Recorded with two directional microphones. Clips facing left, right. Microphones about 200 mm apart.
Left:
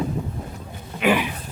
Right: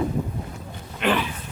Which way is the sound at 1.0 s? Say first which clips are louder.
Left 3 dB; 10° left (ahead or behind).